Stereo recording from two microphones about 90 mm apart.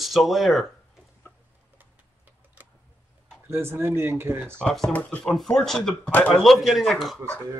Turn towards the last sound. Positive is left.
turn(degrees=0)  # may be behind; listen again after turning